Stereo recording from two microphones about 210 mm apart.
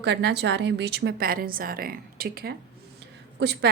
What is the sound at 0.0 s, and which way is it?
Speech, 55° right (ahead or behind).